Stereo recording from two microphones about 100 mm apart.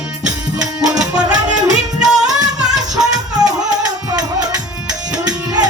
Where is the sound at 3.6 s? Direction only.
40° right (ahead or behind).